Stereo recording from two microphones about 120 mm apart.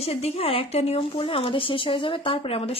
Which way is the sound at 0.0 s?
60° left (ahead or behind).